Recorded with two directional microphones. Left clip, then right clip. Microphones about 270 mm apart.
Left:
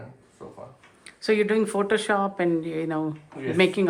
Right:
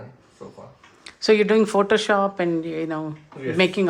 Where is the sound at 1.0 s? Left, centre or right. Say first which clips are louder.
Right 5 dB; centre.